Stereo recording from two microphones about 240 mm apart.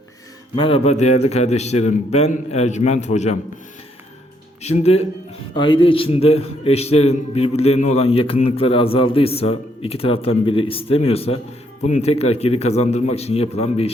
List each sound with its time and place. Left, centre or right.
0.5 s a man's voice: left
4.6 s a man's voice: left